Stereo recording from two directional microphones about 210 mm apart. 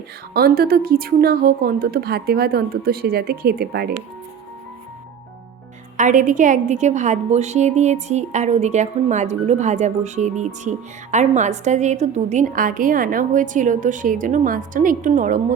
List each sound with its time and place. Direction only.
0.3 s a woman's voice: 45° right (ahead or behind)
6.0 s a woman's voice: 40° right (ahead or behind)